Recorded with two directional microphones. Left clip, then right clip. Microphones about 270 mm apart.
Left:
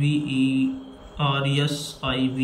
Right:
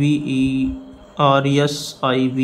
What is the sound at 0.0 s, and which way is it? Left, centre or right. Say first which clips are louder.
Speech: right 5 dB; centre.